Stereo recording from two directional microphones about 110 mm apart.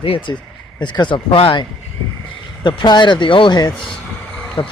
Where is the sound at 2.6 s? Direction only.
45° left (ahead or behind).